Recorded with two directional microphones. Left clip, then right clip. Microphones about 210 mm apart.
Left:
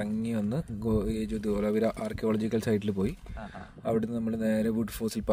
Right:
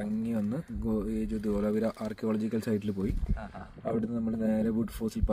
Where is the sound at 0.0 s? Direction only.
55° left (ahead or behind).